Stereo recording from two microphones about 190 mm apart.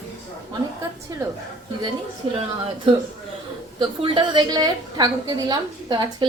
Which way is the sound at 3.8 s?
25° right (ahead or behind).